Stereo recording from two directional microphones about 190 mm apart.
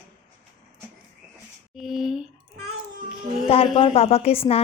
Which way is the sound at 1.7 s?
Centre (ahead or behind).